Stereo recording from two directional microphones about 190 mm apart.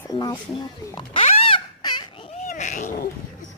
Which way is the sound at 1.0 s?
35° left (ahead or behind).